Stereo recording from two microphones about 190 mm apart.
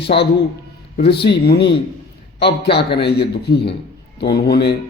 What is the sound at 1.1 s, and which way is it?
A man's voice, 60° left (ahead or behind).